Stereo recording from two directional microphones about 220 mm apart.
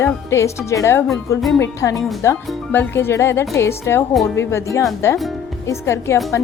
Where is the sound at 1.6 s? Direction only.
15° left (ahead or behind).